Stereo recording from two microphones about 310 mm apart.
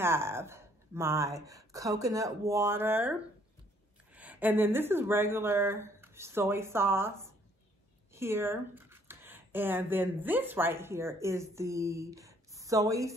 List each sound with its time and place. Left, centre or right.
0.0 s speech: centre